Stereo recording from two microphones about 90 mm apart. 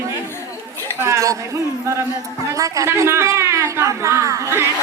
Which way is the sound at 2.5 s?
35° right (ahead or behind).